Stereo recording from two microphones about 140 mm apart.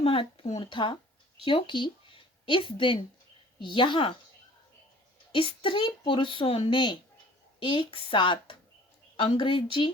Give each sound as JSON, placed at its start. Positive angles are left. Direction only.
{"t": 0.0, "sound": "a woman's voice", "side_deg": 40}
{"t": 5.3, "sound": "a woman's voice", "side_deg": 40}